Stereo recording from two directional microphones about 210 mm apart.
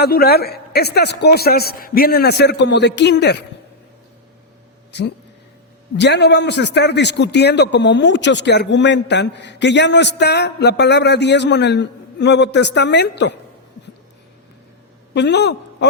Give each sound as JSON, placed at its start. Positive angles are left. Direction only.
{"t": 0.0, "sound": "a man's voice", "side_deg": 45}
{"t": 4.9, "sound": "a man's voice", "side_deg": 55}
{"t": 15.1, "sound": "a man's voice", "side_deg": 55}